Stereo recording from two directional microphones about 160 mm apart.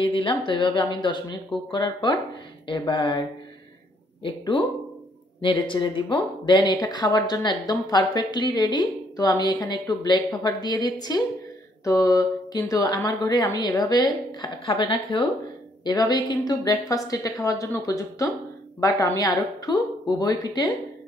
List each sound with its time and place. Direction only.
0.0 s speech: 30° left (ahead or behind)